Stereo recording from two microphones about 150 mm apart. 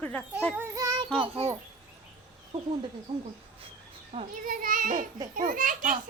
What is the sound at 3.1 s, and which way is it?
Speech, 40° right (ahead or behind).